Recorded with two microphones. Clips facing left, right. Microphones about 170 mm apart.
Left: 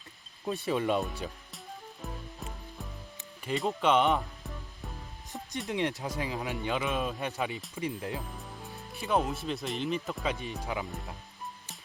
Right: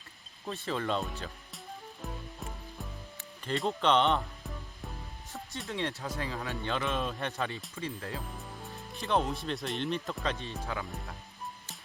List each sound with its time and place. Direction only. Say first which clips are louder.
0.4 s speech: left 4 dB; 15° left (ahead or behind)
2.0 s music: even; centre (ahead or behind)
5.3 s speech: left 4 dB; 15° left (ahead or behind)
8.2 s speech: even; centre (ahead or behind)
10.3 s speech: left 2 dB; 15° left (ahead or behind)